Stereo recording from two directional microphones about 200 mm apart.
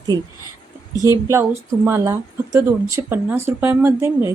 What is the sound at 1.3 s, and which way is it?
Speech, 10° right (ahead or behind).